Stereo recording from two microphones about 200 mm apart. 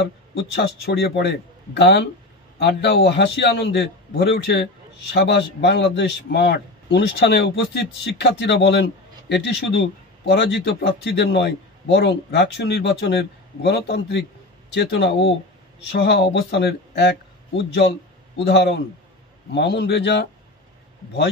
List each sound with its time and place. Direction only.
0.3 s a man's voice: 60° left (ahead or behind)